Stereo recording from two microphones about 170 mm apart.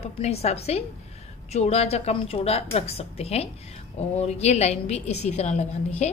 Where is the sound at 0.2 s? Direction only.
40° left (ahead or behind).